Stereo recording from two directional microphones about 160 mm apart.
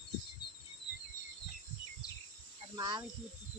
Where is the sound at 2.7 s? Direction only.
25° right (ahead or behind).